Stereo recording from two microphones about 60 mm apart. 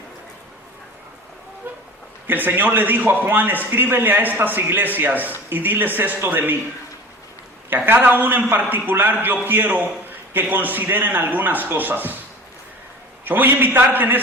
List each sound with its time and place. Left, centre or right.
1.7 s a man's voice: right
7.9 s a man's voice: right
13.2 s a man's voice: right